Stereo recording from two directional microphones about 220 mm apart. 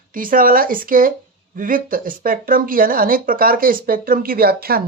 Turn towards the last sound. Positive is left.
turn(degrees=-45)  # may be behind; listen again after turning